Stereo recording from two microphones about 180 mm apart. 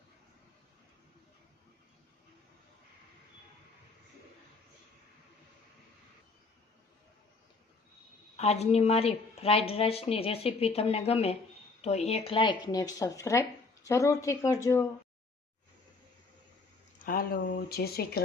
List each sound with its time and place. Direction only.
8.4 s speech: 35° left (ahead or behind); by 14.8 s 15° left (ahead or behind)
17.0 s a sound: 50° left (ahead or behind)
17.7 s speech: 60° left (ahead or behind)